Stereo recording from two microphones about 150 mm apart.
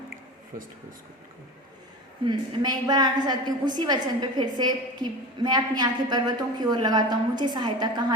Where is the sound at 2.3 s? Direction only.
30° right (ahead or behind).